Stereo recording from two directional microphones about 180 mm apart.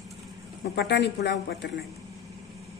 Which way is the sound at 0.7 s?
65° left (ahead or behind).